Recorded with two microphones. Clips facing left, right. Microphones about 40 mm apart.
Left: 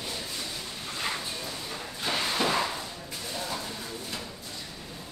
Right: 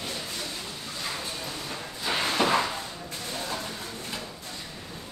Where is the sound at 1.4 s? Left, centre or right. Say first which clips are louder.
Right 1 dB; centre.